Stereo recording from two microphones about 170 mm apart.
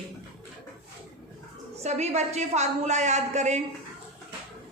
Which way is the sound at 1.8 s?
40° right (ahead or behind).